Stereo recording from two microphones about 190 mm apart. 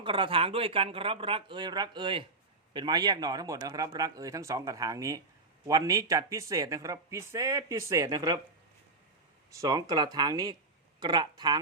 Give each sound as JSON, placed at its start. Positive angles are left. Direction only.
{"t": 0.0, "sound": "speech", "side_deg": -25}
{"t": 9.5, "sound": "speech", "side_deg": -20}